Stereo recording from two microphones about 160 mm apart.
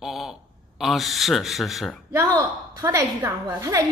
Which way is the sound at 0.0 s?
Centre (ahead or behind).